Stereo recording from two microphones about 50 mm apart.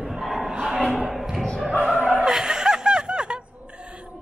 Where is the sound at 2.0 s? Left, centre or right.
Centre.